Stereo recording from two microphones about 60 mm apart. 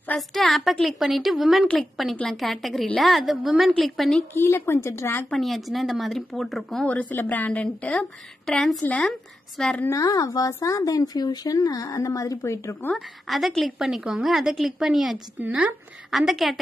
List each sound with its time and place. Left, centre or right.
0.3 s a woman's voice: centre
4.3 s speech: left
5.3 s a woman's voice: centre
6.9 s a woman's voice: left
8.5 s a woman's voice: centre
9.6 s a woman's voice: centre
9.9 s speech: left
12.9 s a woman's voice: centre